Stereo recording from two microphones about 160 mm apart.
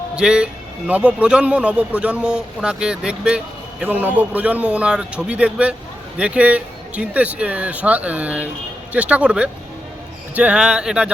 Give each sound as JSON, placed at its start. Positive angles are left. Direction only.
{"t": 0.2, "sound": "a man's voice", "side_deg": -5}